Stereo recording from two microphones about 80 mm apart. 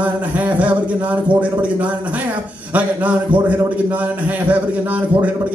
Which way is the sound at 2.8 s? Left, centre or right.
Centre.